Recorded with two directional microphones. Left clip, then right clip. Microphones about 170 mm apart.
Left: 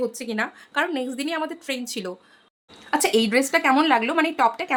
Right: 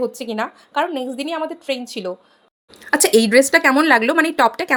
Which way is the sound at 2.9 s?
25° right (ahead or behind).